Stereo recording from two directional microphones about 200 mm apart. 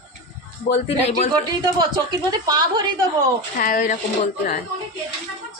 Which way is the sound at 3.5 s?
40° left (ahead or behind).